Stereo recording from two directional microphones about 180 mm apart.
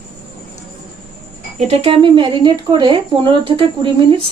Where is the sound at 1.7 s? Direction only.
30° right (ahead or behind).